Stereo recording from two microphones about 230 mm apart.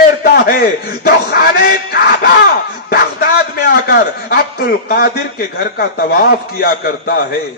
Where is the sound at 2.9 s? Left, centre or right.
Left.